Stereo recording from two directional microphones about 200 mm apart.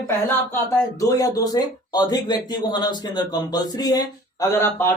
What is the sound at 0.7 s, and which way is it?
Speech, 15° left (ahead or behind).